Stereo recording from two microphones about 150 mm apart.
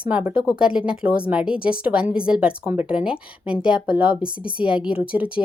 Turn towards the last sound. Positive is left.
turn(degrees=-10)  # may be behind; listen again after turning